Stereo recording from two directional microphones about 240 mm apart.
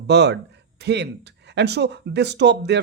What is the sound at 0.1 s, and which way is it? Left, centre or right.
Speech, right.